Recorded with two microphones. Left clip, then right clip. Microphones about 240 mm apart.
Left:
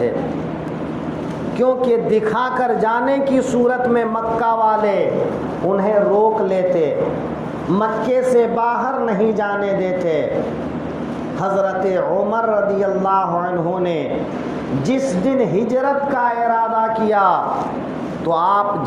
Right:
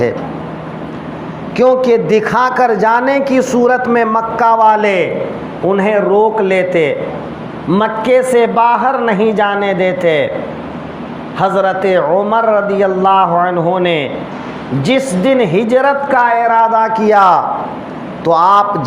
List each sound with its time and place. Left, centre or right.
1.5 s speech: right
11.3 s speech: right